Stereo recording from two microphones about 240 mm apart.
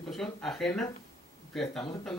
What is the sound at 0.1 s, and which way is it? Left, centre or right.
Speech, centre.